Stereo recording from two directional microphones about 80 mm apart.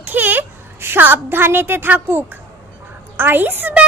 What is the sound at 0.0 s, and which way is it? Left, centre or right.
A woman's voice, right.